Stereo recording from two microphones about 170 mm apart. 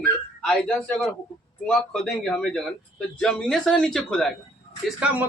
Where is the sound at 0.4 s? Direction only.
5° left (ahead or behind).